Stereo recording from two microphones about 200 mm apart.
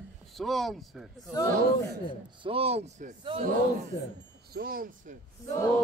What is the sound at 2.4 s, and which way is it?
Speech, 30° right (ahead or behind).